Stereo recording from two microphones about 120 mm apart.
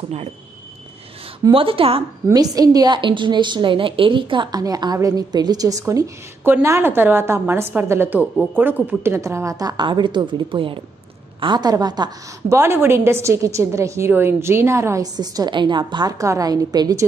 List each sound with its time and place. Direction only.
1.5 s speech: 50° right (ahead or behind)
2.2 s a woman's voice: 30° right (ahead or behind)
12.5 s a woman's voice: 20° right (ahead or behind)
15.1 s a woman's voice: 35° right (ahead or behind)